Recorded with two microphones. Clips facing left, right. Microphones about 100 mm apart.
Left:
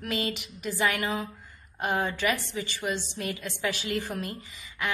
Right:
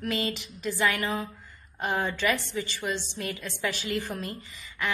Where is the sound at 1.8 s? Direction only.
5° left (ahead or behind).